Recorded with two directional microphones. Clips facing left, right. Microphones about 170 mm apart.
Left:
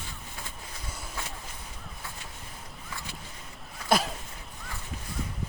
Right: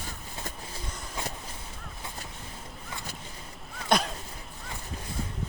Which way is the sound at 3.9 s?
5° left (ahead or behind).